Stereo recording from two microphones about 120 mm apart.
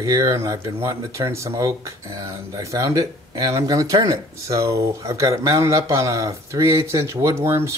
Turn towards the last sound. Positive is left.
turn(degrees=-20)  # may be behind; listen again after turning